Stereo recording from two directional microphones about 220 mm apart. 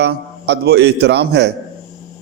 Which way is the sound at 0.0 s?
50° right (ahead or behind).